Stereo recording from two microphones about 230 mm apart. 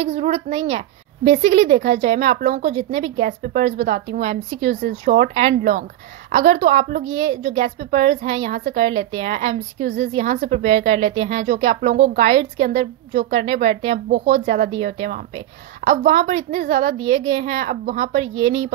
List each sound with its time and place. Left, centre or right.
0.0 s a woman's voice: right